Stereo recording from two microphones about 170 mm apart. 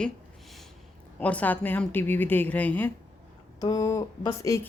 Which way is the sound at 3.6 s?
20° left (ahead or behind).